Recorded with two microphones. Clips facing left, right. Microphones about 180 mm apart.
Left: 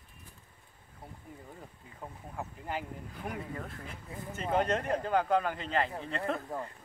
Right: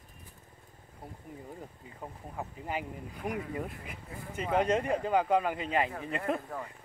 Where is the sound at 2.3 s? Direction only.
5° right (ahead or behind).